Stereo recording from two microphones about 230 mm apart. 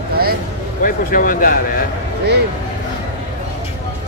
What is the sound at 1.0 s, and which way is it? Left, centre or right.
Speech, left.